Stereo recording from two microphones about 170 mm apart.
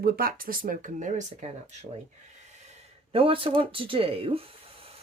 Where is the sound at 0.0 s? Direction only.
60° right (ahead or behind).